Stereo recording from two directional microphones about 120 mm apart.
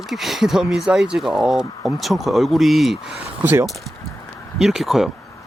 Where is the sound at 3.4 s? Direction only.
15° right (ahead or behind).